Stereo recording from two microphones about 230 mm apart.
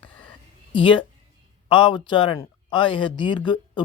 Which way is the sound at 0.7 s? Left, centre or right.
Left.